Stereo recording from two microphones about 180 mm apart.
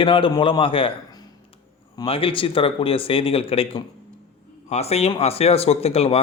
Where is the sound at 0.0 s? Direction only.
30° left (ahead or behind).